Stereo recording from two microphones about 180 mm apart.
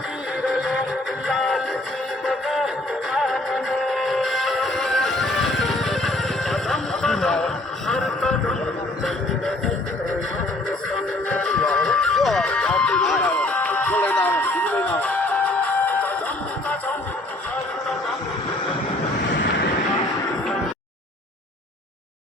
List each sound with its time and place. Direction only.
0.4 s music: centre (ahead or behind)
10.9 s music: 5° left (ahead or behind)
19.3 s vehicle: 75° left (ahead or behind)